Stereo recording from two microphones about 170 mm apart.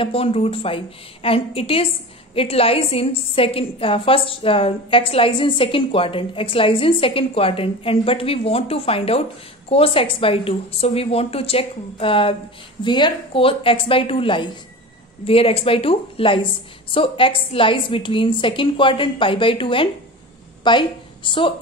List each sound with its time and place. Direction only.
0.0 s a woman's voice: 35° left (ahead or behind)